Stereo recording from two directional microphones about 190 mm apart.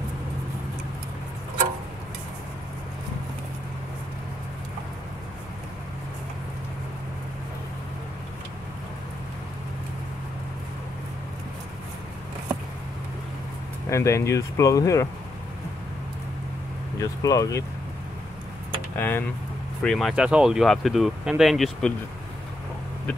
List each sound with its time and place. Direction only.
13.8 s speech: 15° left (ahead or behind)
17.0 s speech: 20° left (ahead or behind)
18.9 s speech: 10° left (ahead or behind)